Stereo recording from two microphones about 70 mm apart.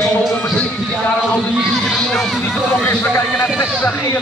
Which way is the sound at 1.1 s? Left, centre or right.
Centre.